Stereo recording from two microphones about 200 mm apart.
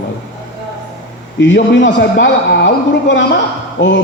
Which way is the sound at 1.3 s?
60° left (ahead or behind).